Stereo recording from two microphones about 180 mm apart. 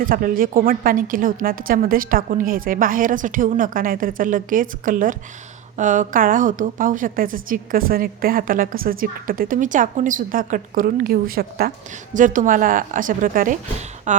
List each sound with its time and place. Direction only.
0.0 s a woman's voice: 50° right (ahead or behind)
12.1 s a woman's voice: 45° right (ahead or behind)